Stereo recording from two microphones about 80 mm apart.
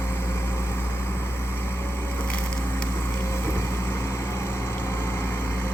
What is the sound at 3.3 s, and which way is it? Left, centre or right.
Vehicle, left.